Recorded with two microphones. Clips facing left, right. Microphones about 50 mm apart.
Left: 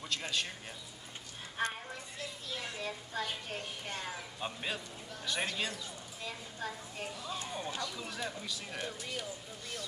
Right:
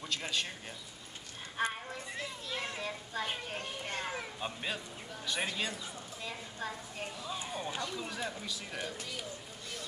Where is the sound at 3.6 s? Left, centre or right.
Right.